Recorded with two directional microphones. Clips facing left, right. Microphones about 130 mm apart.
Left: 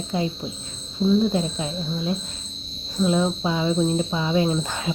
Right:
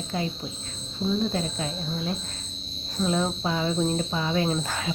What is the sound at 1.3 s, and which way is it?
Speech, 20° left (ahead or behind).